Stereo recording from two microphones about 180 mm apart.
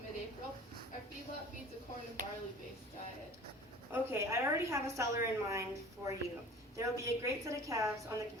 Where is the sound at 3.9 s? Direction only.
15° right (ahead or behind).